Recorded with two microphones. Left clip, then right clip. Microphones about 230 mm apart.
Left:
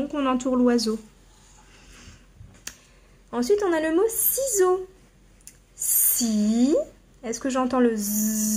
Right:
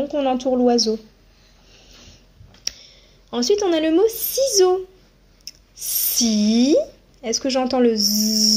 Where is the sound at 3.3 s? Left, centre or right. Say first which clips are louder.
Right 3 dB; centre.